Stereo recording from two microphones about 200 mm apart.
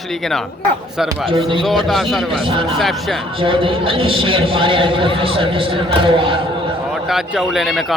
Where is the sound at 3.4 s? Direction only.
25° right (ahead or behind).